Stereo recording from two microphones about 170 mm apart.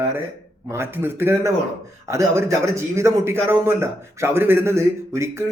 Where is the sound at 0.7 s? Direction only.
15° right (ahead or behind).